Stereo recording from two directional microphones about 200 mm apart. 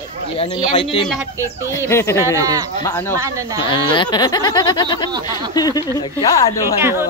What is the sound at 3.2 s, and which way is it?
Speech, 15° right (ahead or behind).